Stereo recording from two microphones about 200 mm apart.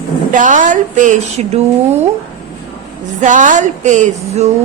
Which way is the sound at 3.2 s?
40° right (ahead or behind).